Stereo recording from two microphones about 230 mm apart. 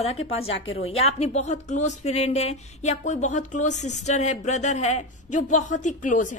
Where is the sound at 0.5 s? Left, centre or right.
Left.